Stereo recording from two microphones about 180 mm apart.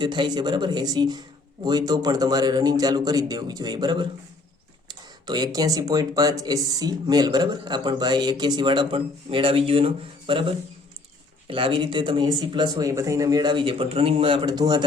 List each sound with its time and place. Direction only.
0.0 s speech: 25° right (ahead or behind)